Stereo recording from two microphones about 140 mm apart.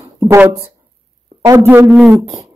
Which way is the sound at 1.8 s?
Centre (ahead or behind).